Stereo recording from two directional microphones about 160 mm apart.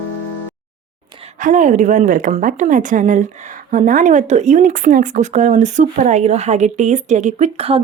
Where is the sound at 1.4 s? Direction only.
50° right (ahead or behind).